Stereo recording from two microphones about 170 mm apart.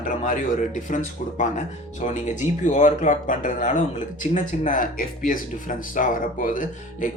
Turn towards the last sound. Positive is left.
turn(degrees=55)  # may be behind; listen again after turning